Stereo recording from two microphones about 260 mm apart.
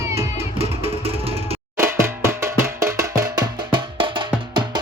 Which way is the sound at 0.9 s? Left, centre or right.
Right.